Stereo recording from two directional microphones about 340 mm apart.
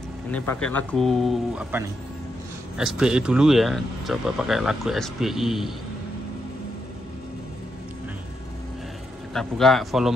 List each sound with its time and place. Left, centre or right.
0.3 s speech: centre
9.3 s speech: centre